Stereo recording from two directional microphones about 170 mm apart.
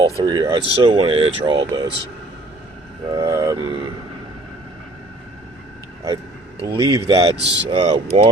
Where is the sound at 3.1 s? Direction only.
20° right (ahead or behind).